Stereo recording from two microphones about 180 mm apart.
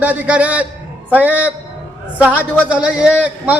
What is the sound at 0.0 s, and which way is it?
A man's voice, 5° right (ahead or behind).